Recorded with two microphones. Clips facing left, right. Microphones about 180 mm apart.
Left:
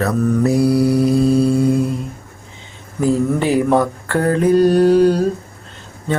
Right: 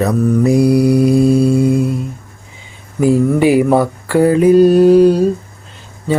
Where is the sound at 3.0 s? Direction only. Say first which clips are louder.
Right 5 dB; 10° right (ahead or behind).